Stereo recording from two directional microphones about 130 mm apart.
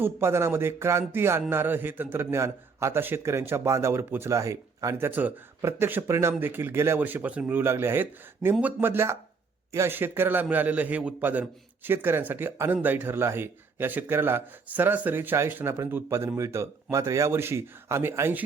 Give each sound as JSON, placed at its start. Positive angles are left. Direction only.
{"t": 0.0, "sound": "speech", "side_deg": -20}